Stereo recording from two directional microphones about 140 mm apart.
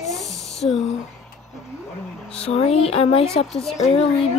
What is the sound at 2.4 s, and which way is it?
A child's voice, 45° left (ahead or behind).